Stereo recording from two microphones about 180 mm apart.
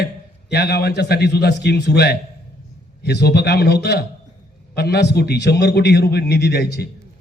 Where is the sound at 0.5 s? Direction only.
65° left (ahead or behind).